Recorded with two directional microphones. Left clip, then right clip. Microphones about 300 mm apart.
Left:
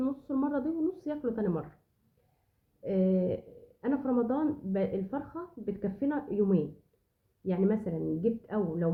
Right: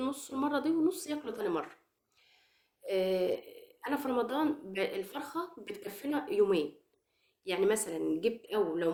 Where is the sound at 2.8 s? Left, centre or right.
Centre.